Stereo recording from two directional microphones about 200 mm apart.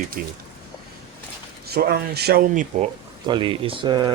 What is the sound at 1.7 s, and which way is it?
Speech, 50° right (ahead or behind).